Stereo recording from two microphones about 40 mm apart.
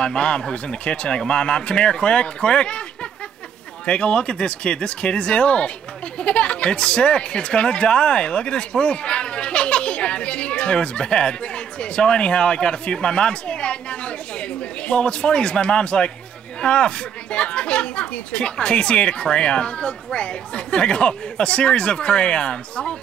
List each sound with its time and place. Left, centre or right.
0.0 s speech: left